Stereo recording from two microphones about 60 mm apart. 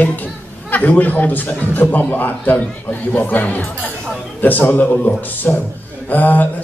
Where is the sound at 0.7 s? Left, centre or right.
Left.